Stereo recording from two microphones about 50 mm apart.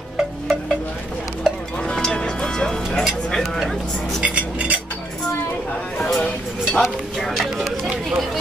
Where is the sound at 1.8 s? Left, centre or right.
Left.